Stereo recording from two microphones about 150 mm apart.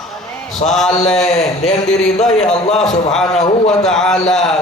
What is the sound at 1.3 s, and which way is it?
Speech, 45° left (ahead or behind).